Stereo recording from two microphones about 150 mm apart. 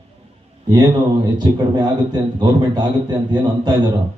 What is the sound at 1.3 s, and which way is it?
A man's voice, 30° right (ahead or behind).